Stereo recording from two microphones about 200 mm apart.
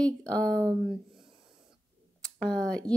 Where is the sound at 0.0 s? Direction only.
5° left (ahead or behind).